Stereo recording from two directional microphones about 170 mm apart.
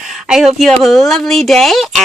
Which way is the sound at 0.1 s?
Centre (ahead or behind).